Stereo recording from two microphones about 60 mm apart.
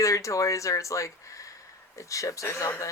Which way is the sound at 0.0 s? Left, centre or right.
Left.